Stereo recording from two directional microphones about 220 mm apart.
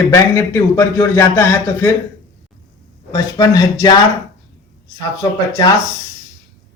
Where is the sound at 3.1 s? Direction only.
15° left (ahead or behind).